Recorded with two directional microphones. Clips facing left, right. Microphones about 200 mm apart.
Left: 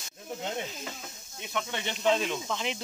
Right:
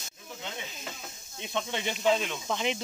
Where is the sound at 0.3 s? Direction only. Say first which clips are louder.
Left 6 dB; 40° left (ahead or behind).